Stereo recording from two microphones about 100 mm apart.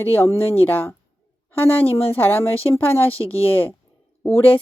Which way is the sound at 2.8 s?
20° left (ahead or behind).